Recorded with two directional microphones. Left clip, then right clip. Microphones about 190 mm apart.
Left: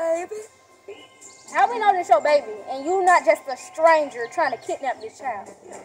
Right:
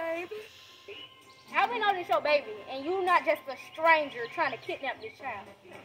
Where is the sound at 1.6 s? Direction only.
25° left (ahead or behind).